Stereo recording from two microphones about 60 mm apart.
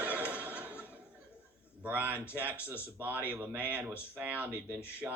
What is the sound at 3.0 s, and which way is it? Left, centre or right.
Speech, right.